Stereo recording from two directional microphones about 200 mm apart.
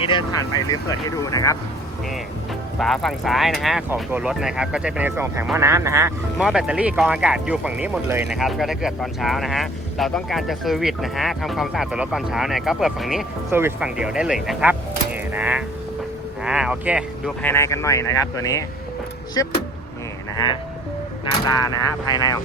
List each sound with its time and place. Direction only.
0.0 s speech: 25° left (ahead or behind)
2.7 s speech: centre (ahead or behind); by 6.1 s 15° right (ahead or behind)
6.4 s speech: 5° right (ahead or behind)
13.5 s speech: 10° right (ahead or behind)
17.4 s speech: 15° left (ahead or behind)
22.0 s speech: 20° left (ahead or behind)